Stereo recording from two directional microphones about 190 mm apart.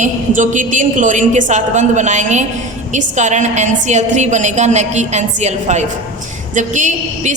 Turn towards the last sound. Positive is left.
turn(degrees=-40)  # may be behind; listen again after turning